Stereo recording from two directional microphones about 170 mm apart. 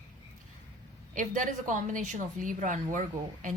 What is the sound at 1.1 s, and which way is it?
A woman's voice, 50° right (ahead or behind).